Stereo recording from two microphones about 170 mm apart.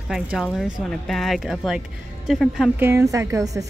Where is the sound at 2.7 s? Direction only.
15° right (ahead or behind).